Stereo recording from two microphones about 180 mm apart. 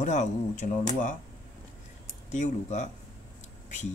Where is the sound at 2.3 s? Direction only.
40° left (ahead or behind).